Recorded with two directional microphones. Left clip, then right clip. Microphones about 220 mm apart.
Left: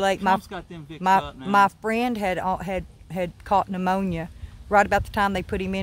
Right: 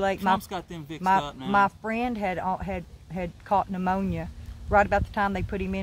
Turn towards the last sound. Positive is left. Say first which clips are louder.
# left 4 dB
turn(degrees=45)  # may be behind; listen again after turning